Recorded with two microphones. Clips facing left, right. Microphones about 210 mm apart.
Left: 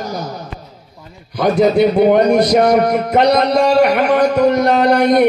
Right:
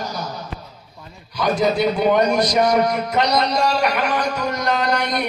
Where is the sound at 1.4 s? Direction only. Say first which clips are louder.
Left 6 dB; 60° left (ahead or behind).